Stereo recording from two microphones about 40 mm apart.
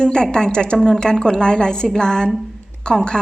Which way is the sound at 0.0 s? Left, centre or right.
Centre.